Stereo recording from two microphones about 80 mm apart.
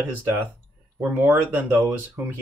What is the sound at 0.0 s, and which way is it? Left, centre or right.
Speech, right.